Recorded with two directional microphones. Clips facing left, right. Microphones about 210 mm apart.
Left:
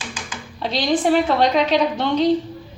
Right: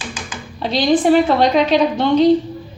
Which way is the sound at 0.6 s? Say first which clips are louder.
Right 5 dB; 5° right (ahead or behind).